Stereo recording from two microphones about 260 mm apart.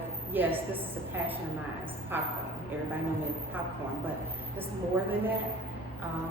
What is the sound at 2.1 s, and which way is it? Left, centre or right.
Speech, centre.